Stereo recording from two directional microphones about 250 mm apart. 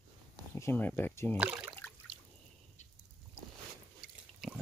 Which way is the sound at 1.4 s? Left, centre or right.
Centre.